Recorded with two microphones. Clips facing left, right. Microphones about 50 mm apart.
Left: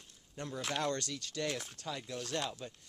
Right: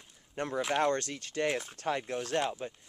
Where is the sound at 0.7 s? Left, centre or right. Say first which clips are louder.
Right 6 dB; right.